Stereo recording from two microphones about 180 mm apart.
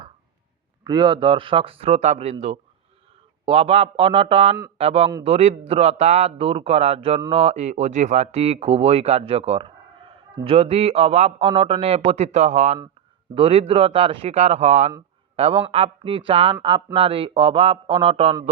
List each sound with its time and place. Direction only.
0.9 s speech: 25° right (ahead or behind)